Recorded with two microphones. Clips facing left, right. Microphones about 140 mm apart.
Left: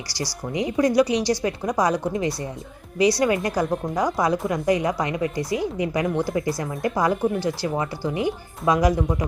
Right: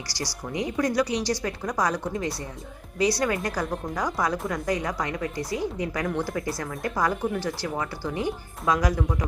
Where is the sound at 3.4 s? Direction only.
15° left (ahead or behind).